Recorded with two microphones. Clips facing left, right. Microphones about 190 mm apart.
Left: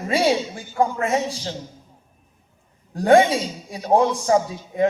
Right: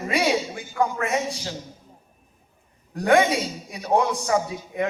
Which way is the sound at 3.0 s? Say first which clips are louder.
Left 4 dB; 30° left (ahead or behind).